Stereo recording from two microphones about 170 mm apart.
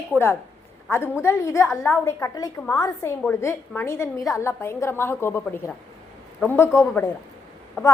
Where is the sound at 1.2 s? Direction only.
15° left (ahead or behind).